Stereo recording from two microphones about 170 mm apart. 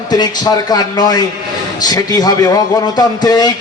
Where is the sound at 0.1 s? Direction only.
25° left (ahead or behind).